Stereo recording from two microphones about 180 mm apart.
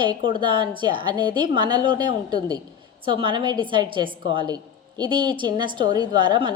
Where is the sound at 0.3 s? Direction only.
25° right (ahead or behind).